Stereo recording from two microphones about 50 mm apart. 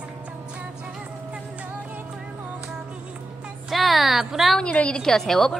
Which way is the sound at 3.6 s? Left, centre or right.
Centre.